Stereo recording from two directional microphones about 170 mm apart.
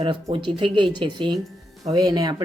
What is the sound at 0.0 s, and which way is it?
Speech, 30° right (ahead or behind).